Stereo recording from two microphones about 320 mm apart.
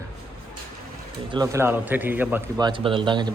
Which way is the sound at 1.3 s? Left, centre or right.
Centre.